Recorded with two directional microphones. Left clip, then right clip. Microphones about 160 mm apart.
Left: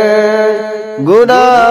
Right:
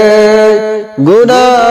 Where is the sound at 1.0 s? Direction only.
25° right (ahead or behind).